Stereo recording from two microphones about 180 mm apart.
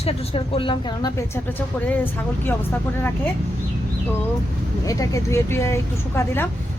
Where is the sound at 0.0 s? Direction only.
35° left (ahead or behind).